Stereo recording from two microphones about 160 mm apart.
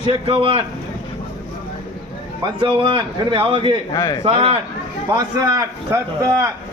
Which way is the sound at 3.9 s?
25° left (ahead or behind).